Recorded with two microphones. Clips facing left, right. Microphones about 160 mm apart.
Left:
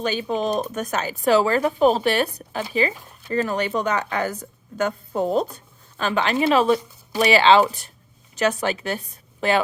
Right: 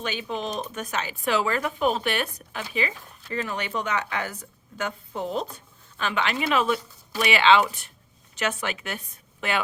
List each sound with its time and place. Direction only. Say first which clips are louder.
0.0 s a woman's voice: left 7 dB; 35° left (ahead or behind)